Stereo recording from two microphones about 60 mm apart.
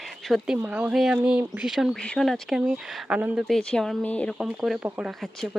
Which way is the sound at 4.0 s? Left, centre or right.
Left.